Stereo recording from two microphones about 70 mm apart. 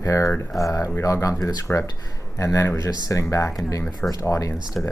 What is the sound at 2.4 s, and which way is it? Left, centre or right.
Speech, left.